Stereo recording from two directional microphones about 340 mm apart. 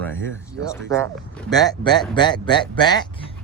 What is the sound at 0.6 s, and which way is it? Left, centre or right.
Speech, centre.